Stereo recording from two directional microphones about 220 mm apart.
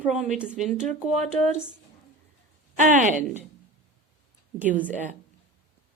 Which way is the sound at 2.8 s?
35° right (ahead or behind).